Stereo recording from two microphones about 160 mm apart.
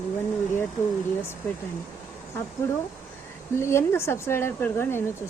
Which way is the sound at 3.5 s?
15° left (ahead or behind).